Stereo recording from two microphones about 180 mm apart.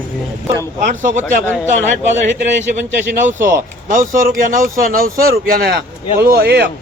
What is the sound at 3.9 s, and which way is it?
Speech, 50° right (ahead or behind).